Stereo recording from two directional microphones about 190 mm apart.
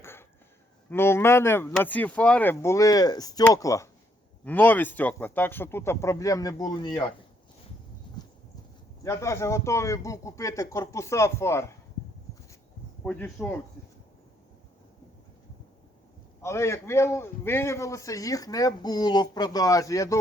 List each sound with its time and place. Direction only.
0.0 s a sound: 10° left (ahead or behind)
0.9 s a man's voice: 10° left (ahead or behind)
9.0 s a man's voice: 15° left (ahead or behind)
13.1 s a man's voice: 10° left (ahead or behind)
16.4 s a man's voice: 15° left (ahead or behind)